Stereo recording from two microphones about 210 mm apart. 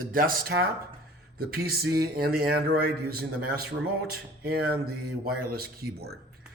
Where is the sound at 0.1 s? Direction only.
45° right (ahead or behind).